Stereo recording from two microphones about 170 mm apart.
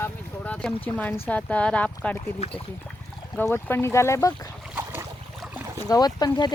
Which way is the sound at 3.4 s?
10° left (ahead or behind).